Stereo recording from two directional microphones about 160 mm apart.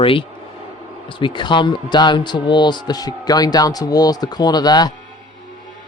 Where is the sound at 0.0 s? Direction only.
35° left (ahead or behind).